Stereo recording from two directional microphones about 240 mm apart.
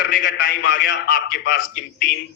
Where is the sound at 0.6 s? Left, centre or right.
Left.